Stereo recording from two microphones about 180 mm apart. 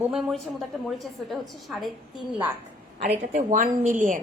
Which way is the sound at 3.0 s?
40° right (ahead or behind).